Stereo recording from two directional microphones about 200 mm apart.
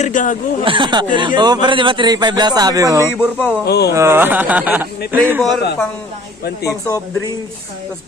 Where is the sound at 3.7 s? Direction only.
55° left (ahead or behind).